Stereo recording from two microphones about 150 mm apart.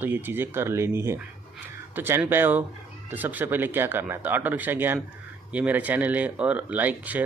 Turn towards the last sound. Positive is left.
turn(degrees=-10)  # may be behind; listen again after turning